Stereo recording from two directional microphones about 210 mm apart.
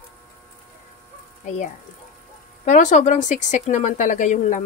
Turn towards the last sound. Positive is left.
turn(degrees=35)  # may be behind; listen again after turning